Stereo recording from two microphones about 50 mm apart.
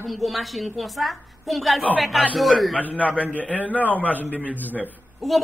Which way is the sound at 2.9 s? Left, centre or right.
Left.